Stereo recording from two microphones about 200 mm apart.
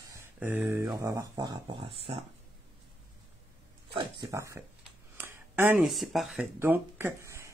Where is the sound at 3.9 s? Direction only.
20° right (ahead or behind); by 6.5 s centre (ahead or behind).